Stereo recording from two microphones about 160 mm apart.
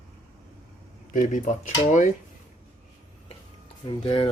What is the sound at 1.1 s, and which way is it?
Speech, 50° left (ahead or behind).